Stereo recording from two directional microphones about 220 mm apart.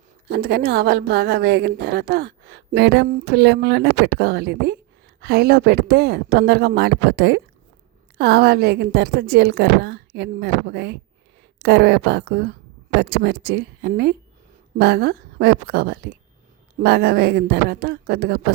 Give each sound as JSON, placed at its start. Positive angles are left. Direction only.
{"t": 0.3, "sound": "a woman's voice", "side_deg": -45}